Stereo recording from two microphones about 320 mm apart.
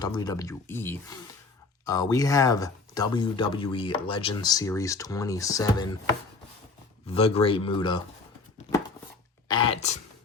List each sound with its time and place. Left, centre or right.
0.0 s speech: centre
7.1 s speech: centre
9.5 s speech: centre